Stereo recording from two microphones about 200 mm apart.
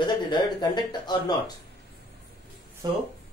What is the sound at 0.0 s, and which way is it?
Speech, 20° left (ahead or behind).